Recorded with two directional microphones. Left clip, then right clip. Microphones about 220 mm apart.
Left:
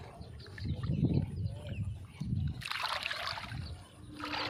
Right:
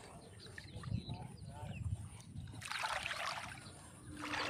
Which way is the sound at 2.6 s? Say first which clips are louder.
Left 4 dB; 40° left (ahead or behind).